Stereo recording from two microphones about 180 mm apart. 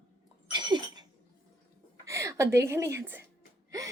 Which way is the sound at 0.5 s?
25° right (ahead or behind).